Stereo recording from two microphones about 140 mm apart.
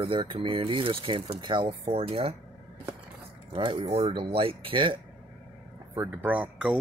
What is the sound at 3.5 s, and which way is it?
Speech, 35° right (ahead or behind).